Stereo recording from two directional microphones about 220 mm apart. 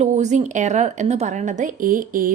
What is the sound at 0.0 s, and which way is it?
A woman's voice, 30° right (ahead or behind).